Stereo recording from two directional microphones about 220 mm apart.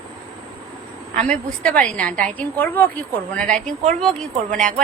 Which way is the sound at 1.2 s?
5° left (ahead or behind).